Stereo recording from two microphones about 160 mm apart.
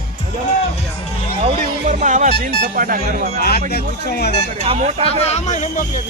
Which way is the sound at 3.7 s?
80° left.